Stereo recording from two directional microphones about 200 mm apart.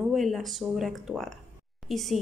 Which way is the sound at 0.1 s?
Centre (ahead or behind).